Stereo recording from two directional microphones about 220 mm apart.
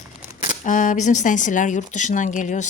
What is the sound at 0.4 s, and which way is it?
Speech, 35° left (ahead or behind).